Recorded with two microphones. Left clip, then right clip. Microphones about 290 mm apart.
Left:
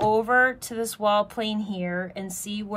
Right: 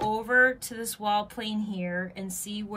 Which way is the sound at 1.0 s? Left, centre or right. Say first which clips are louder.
Left 5 dB; left.